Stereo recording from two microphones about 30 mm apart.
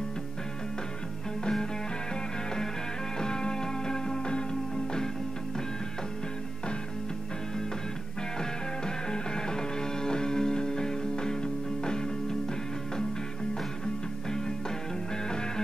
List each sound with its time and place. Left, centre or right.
3.2 s music: left
8.4 s music: left
15.2 s music: left